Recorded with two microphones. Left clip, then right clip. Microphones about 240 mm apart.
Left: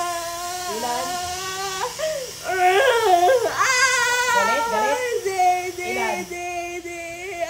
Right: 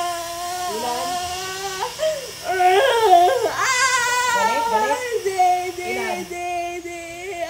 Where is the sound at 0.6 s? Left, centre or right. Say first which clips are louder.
Even; centre.